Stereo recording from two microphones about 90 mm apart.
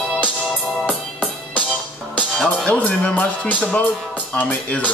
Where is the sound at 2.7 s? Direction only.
15° left (ahead or behind).